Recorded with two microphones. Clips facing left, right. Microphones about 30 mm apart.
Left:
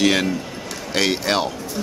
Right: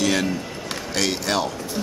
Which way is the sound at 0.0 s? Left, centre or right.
Left.